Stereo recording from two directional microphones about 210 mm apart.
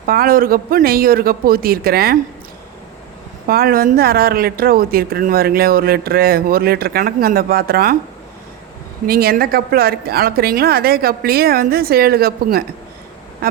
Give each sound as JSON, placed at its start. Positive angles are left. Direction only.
{"t": 0.0, "sound": "speech", "side_deg": -45}
{"t": 3.4, "sound": "speech", "side_deg": -45}
{"t": 9.0, "sound": "speech", "side_deg": -45}